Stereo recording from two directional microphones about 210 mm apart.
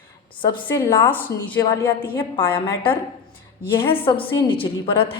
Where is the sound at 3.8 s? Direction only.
25° left (ahead or behind).